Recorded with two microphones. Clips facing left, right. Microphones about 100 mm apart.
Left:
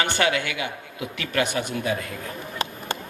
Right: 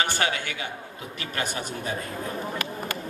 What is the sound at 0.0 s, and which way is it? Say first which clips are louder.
A man's voice: left 3 dB; 35° right (ahead or behind).